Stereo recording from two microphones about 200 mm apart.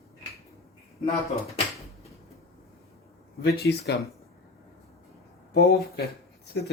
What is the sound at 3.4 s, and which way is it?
Speech, 55° left (ahead or behind).